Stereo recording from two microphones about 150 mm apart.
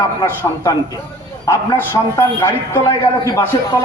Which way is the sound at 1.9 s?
20° left (ahead or behind).